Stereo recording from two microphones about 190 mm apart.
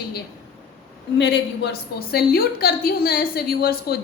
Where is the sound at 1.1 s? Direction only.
65° left (ahead or behind).